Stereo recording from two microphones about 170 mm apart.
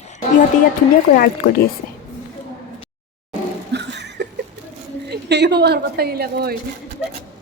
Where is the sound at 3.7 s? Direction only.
85° right.